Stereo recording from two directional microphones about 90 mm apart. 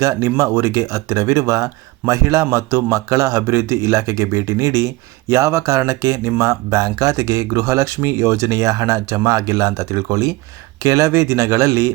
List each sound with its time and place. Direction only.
0.0 s speech: 35° right (ahead or behind)